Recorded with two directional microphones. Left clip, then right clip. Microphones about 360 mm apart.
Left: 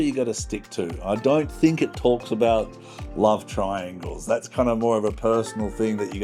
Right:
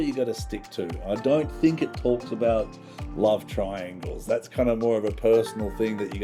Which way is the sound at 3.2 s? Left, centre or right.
Left.